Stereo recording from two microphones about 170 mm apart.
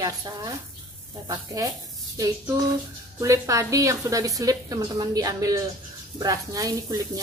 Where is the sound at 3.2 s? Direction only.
20° right (ahead or behind).